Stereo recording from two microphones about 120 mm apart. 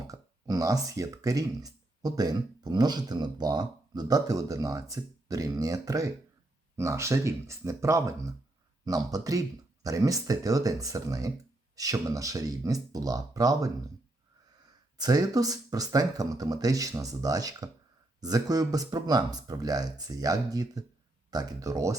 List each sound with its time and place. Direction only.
0.1 s speech: 30° right (ahead or behind)
14.9 s speech: 35° right (ahead or behind)